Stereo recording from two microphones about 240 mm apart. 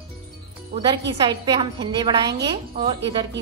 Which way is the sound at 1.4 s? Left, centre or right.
Centre.